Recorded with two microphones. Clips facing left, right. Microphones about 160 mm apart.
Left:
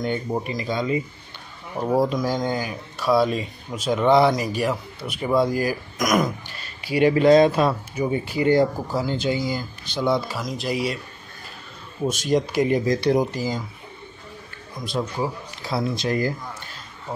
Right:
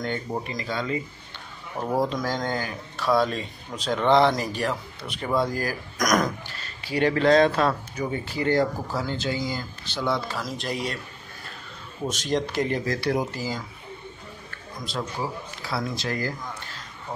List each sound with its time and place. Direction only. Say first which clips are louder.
0.0 s speech: left 4 dB; 15° left (ahead or behind)
12.1 s speech: left 4 dB; 10° left (ahead or behind)
15.6 s speech: left 5 dB; 20° left (ahead or behind)